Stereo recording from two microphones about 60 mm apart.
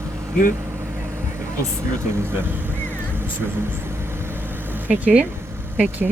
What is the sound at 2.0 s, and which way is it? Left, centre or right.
Vehicle, right.